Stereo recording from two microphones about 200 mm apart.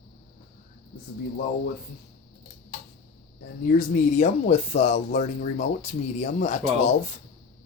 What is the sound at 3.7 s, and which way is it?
Speech, 40° left (ahead or behind).